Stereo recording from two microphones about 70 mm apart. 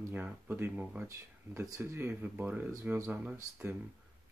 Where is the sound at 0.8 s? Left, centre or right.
Centre.